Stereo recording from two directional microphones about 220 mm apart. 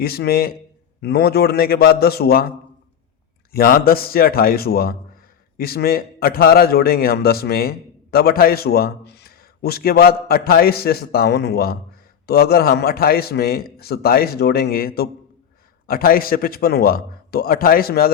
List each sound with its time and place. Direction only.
0.0 s a man's voice: 45° left (ahead or behind)
3.5 s a man's voice: 40° left (ahead or behind)